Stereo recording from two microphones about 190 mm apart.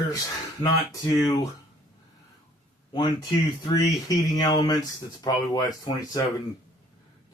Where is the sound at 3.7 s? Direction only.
20° left (ahead or behind).